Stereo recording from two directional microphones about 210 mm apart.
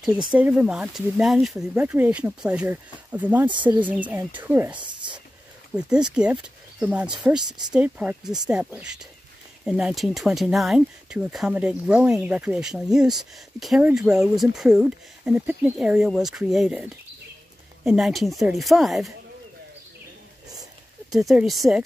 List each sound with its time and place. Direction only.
0.3 s speech: 5° right (ahead or behind)
3.4 s speech: 20° right (ahead or behind)
3.8 s speech: 5° right (ahead or behind)
4.7 s a sound: 20° right (ahead or behind)
5.8 s speech: 5° right (ahead or behind)
21.1 s speech: centre (ahead or behind)